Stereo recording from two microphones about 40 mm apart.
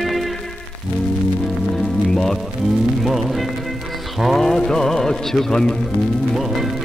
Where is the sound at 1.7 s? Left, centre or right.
Centre.